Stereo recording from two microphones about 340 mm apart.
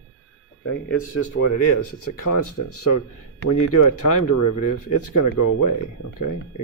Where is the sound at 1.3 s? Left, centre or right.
Left.